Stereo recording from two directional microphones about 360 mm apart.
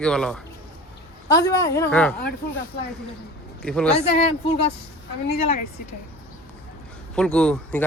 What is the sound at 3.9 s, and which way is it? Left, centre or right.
Speech, centre.